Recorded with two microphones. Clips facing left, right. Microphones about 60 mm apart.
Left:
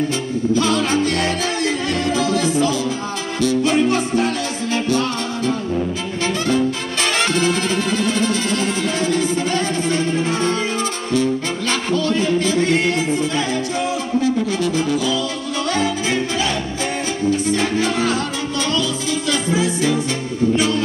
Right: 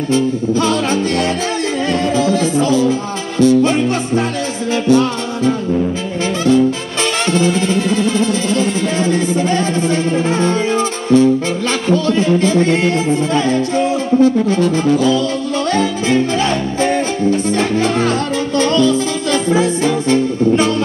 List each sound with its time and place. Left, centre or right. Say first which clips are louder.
1.9 s music: right 7 dB; right
12.4 s music: right 4 dB; right
16.3 s music: right 6 dB; right